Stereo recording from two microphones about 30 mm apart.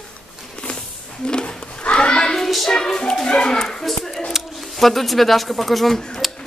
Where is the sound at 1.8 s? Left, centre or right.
Left.